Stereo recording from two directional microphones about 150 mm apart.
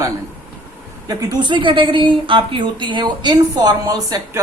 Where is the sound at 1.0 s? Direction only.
30° right (ahead or behind).